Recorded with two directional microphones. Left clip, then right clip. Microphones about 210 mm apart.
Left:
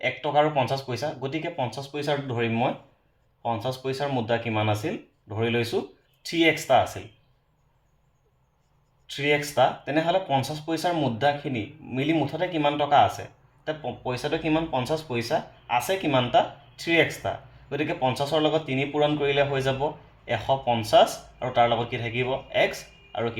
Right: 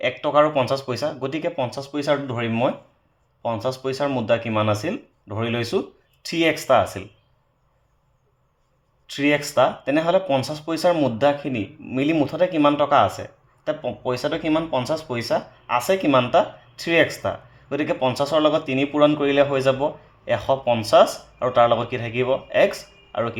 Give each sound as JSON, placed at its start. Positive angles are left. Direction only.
{"t": 0.0, "sound": "speech", "side_deg": -45}
{"t": 9.0, "sound": "speech", "side_deg": -45}